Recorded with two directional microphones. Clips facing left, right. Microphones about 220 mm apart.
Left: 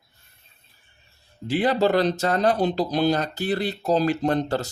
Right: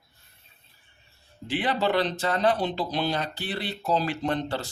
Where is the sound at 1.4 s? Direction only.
40° left (ahead or behind).